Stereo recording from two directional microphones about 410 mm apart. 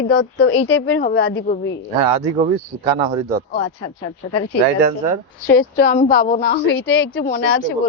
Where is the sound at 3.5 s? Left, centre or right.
Left.